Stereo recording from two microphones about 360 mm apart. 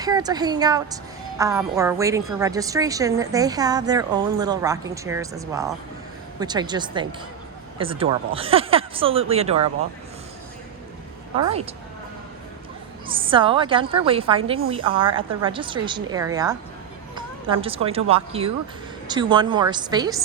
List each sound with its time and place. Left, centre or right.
0.0 s a woman's voice: centre
13.1 s a woman's voice: centre